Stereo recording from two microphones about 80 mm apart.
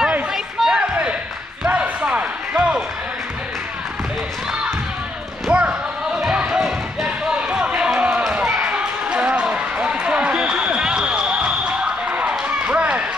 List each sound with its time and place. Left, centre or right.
0.3 s a sound: centre
4.5 s basketball bounce: centre
8.3 s run: centre